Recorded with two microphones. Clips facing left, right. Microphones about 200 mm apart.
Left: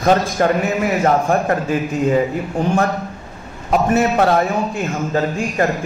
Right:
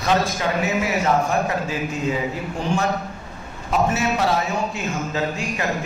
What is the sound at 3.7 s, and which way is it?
A man's voice, 55° left (ahead or behind).